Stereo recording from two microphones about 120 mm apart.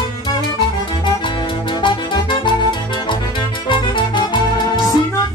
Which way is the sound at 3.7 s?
40° left (ahead or behind).